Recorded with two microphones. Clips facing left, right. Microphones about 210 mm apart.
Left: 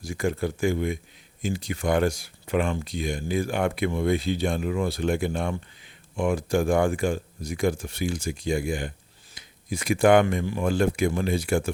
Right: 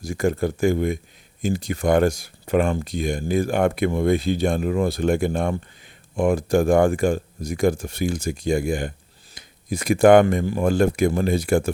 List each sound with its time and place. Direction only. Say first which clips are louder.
0.0 s speech: right 5 dB; 45° right (ahead or behind)